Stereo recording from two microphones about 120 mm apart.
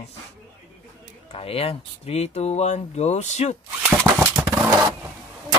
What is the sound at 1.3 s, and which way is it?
Speech, 55° left (ahead or behind).